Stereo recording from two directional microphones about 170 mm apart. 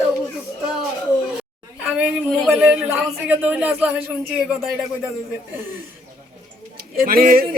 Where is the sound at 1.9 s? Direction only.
10° right (ahead or behind).